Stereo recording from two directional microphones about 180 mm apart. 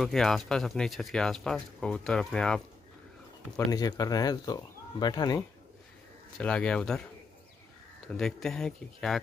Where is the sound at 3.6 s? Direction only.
20° left (ahead or behind).